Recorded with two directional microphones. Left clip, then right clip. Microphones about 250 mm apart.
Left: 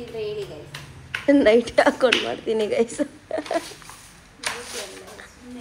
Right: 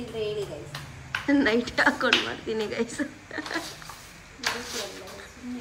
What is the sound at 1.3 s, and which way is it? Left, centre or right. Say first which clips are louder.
Speech: left 8 dB; centre.